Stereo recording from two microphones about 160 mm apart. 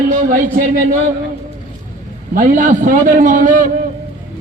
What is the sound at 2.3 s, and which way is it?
A man's voice, 55° right (ahead or behind).